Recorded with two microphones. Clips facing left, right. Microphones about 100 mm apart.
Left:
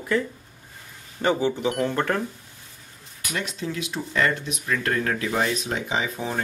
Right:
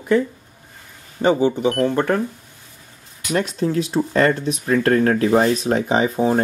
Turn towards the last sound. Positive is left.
turn(degrees=-35)  # may be behind; listen again after turning